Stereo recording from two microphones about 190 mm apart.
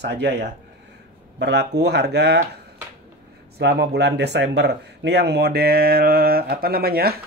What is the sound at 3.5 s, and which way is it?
Speech, 60° right (ahead or behind).